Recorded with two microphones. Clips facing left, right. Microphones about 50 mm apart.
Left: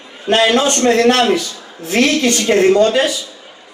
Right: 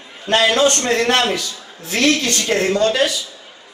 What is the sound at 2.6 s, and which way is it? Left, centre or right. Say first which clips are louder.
Speech: left 7 dB; left.